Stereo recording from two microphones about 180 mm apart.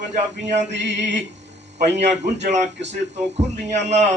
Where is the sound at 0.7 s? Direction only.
75° right (ahead or behind).